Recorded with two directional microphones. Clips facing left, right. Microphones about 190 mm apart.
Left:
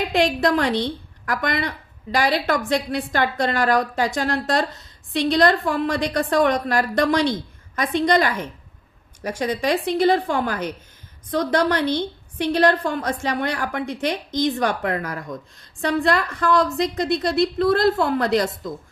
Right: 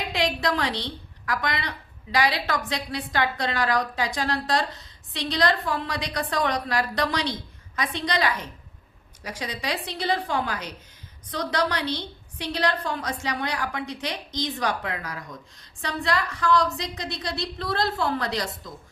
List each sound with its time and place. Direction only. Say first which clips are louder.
0.1 s a woman's voice: left 5 dB; 50° left (ahead or behind)